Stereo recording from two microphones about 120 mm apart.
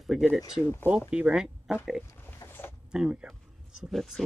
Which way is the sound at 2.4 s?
15° left (ahead or behind).